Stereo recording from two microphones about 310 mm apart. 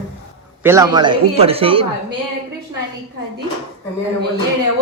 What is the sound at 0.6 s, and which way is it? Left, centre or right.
A woman's voice, centre.